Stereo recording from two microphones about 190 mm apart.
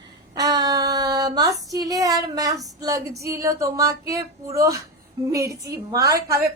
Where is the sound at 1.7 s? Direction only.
20° right (ahead or behind).